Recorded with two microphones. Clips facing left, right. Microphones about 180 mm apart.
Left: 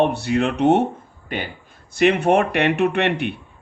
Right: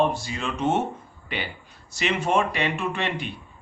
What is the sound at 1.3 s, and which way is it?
Speech, 45° left (ahead or behind).